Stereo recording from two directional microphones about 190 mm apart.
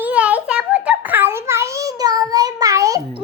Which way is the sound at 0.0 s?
5° right (ahead or behind).